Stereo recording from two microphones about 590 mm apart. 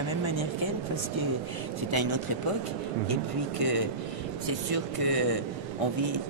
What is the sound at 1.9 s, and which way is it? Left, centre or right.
Speech, right.